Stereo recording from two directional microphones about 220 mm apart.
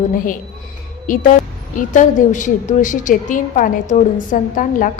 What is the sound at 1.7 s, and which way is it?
A woman's voice, 35° left (ahead or behind).